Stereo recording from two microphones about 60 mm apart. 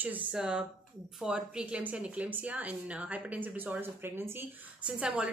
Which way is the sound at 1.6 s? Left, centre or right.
Right.